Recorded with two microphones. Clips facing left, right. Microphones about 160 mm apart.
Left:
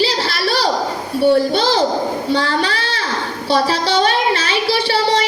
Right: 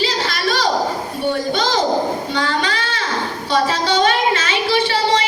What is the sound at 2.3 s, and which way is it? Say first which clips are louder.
Child singing: left 3 dB; 35° left (ahead or behind).